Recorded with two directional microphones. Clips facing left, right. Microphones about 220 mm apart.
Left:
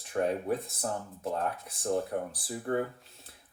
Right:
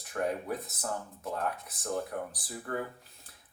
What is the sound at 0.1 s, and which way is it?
Speech, 25° left (ahead or behind).